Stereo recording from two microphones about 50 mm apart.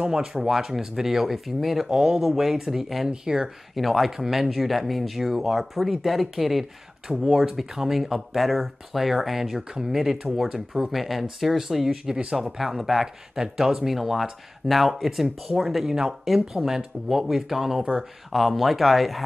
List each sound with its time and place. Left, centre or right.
0.0 s speech: centre
3.1 s speech: centre
3.7 s speech: centre